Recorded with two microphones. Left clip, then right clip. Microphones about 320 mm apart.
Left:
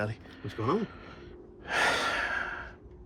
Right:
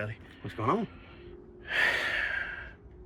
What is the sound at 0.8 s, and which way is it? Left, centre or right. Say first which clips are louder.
Gasp: left 2 dB; left.